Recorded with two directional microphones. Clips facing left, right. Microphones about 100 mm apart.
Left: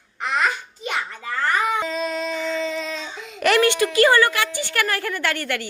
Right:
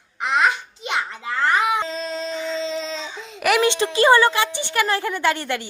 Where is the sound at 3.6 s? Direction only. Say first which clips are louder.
Left 2 dB; 20° right (ahead or behind).